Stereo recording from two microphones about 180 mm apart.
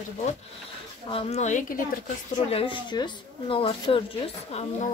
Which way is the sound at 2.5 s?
30° left (ahead or behind).